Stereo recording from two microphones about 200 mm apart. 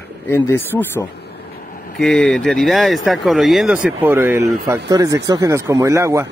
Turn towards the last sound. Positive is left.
turn(degrees=-15)  # may be behind; listen again after turning